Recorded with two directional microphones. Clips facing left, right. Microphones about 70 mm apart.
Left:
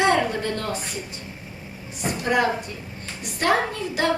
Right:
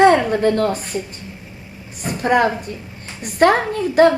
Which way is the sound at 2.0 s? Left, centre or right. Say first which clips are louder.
Right 5 dB; right.